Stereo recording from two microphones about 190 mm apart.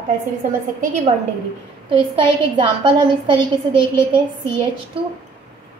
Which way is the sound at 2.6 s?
25° right (ahead or behind).